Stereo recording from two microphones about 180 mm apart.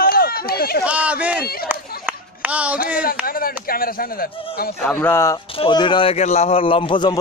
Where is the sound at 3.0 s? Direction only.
55° left (ahead or behind).